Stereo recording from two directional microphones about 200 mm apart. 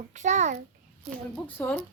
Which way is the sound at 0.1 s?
35° right (ahead or behind).